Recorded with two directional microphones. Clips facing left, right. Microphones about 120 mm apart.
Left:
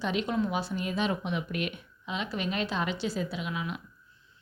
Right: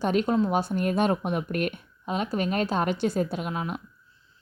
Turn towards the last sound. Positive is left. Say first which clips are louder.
# right 4 dB
turn(degrees=-45)  # may be behind; listen again after turning